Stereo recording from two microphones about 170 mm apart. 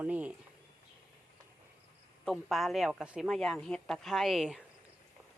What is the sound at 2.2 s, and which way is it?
Speech, centre (ahead or behind).